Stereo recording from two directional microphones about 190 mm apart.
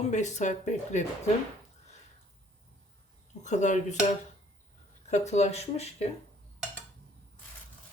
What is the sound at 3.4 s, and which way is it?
Speech, 40° left (ahead or behind).